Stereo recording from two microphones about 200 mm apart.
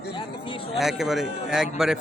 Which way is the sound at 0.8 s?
Centre (ahead or behind).